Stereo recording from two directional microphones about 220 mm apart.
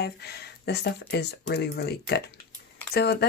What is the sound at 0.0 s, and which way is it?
Speech, 45° left (ahead or behind).